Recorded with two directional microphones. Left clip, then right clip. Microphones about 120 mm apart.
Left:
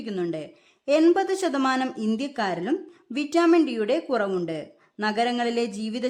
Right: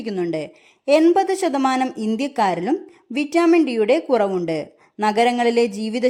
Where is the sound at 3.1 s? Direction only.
10° right (ahead or behind).